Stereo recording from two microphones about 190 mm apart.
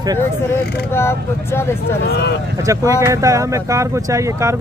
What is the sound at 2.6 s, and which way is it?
Speech, 15° right (ahead or behind).